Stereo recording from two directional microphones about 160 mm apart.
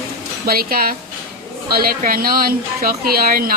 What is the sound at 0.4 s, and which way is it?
A woman's voice, 70° right (ahead or behind).